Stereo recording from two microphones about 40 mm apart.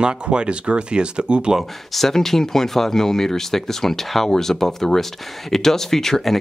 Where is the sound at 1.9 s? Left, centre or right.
Centre.